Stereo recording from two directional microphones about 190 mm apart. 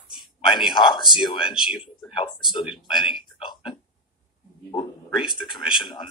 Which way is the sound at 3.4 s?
25° left (ahead or behind).